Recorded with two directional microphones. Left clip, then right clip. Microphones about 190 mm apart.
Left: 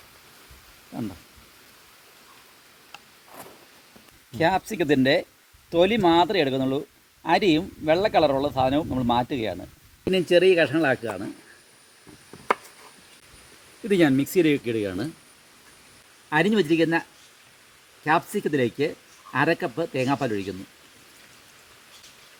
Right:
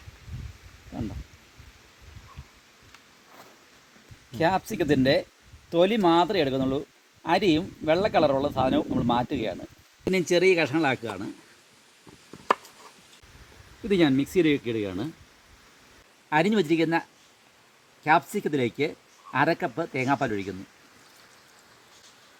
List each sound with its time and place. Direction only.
4.3 s speech: 15° right (ahead or behind)
10.1 s speech: 25° right (ahead or behind)
13.8 s speech: 20° right (ahead or behind)
16.3 s speech: 10° right (ahead or behind)